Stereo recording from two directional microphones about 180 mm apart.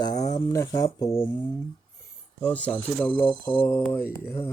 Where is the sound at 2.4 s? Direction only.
5° left (ahead or behind).